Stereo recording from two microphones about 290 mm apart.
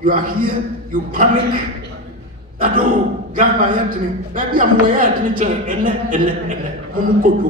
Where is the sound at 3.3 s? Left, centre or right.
Right.